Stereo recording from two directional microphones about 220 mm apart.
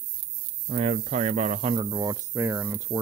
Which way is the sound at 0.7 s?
30° right (ahead or behind).